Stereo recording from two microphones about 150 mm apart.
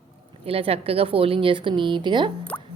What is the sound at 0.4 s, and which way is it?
A woman's voice, 40° right (ahead or behind).